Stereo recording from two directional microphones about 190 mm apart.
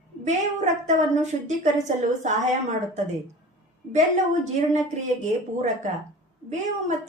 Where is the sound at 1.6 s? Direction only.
40° right (ahead or behind).